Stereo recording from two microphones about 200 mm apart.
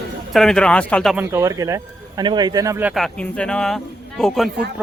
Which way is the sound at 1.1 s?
15° right (ahead or behind).